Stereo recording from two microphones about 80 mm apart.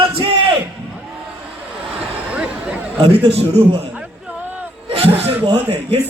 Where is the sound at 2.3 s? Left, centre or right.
Centre.